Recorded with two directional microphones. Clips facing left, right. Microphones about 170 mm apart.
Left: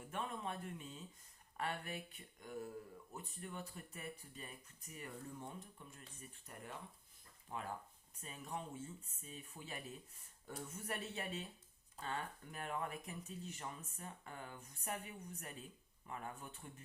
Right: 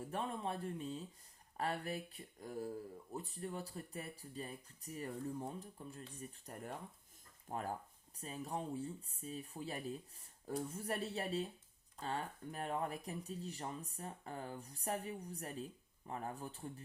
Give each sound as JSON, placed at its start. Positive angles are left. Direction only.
{"t": 0.0, "sound": "speech", "side_deg": -35}